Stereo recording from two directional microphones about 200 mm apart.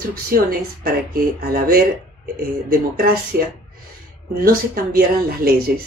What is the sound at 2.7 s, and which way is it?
Speech, 45° right (ahead or behind).